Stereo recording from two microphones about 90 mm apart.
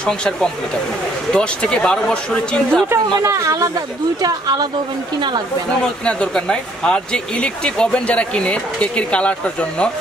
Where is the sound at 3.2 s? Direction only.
35° right (ahead or behind).